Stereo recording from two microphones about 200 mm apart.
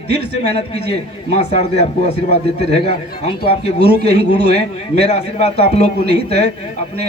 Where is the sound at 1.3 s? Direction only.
30° left (ahead or behind).